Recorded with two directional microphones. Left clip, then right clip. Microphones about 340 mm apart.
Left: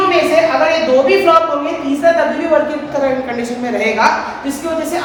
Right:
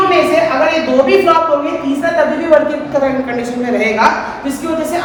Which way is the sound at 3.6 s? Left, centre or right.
Centre.